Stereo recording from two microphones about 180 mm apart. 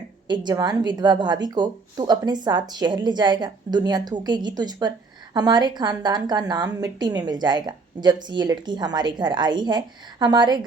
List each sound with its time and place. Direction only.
0.3 s a woman's voice: 25° right (ahead or behind)